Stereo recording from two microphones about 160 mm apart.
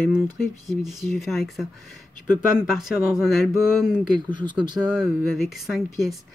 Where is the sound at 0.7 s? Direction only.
Centre (ahead or behind).